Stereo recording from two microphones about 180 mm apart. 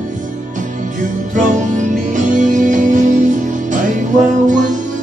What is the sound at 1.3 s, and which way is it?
Music, 45° right (ahead or behind).